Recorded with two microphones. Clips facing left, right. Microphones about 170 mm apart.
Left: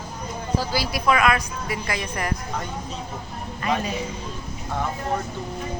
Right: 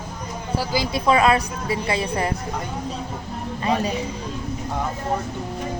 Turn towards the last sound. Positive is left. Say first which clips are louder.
# right 3 dB
turn(degrees=-30)  # may be behind; listen again after turning